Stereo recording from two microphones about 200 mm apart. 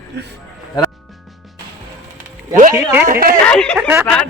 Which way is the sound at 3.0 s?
45° right (ahead or behind).